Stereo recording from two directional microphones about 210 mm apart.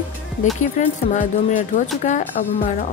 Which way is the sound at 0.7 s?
35° left (ahead or behind).